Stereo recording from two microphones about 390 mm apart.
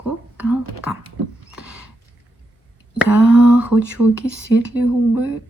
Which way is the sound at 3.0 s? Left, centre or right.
Centre.